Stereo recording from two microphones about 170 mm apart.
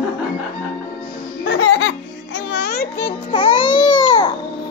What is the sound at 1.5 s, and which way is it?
Music, 90° left.